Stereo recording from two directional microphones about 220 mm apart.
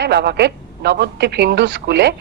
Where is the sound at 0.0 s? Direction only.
50° right (ahead or behind).